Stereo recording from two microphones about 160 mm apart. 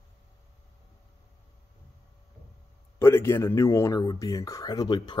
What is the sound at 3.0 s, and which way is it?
Speech, 15° left (ahead or behind).